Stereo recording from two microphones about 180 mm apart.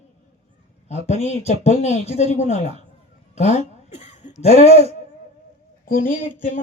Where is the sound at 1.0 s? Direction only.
40° left (ahead or behind).